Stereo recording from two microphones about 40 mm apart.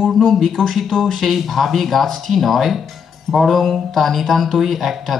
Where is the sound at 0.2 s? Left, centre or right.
Centre.